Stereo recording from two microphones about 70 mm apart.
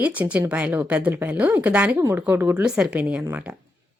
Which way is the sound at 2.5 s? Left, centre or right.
Centre.